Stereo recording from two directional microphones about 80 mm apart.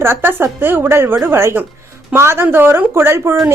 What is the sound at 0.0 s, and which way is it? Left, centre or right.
A woman's voice, right.